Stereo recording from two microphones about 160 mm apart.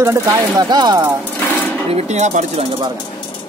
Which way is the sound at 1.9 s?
45° right (ahead or behind).